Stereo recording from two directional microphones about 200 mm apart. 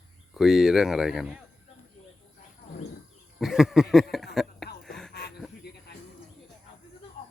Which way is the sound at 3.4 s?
Centre (ahead or behind).